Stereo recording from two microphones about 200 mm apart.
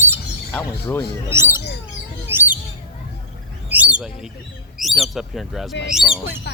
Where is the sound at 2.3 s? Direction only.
10° right (ahead or behind).